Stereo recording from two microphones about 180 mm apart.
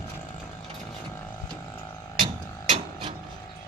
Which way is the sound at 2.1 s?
30° right (ahead or behind).